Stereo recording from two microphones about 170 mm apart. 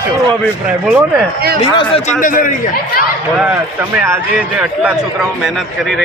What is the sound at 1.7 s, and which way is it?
Speech, 30° left (ahead or behind).